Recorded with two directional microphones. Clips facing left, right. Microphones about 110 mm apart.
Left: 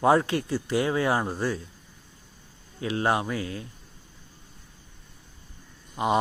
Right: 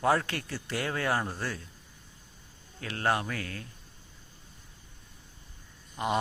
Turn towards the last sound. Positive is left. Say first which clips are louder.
# left 5 dB
turn(degrees=20)  # may be behind; listen again after turning